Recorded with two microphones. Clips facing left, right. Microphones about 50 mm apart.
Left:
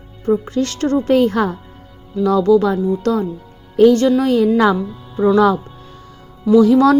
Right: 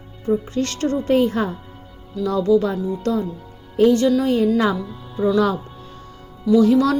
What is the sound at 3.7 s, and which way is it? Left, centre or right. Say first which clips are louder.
Speech: left 4 dB; left.